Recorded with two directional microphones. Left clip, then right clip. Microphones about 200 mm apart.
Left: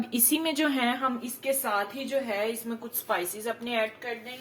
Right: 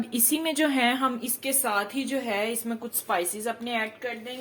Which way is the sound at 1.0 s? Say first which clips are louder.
Even; 55° right (ahead or behind).